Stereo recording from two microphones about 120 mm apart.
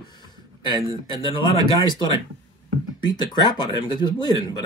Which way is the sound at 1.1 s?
40° left (ahead or behind).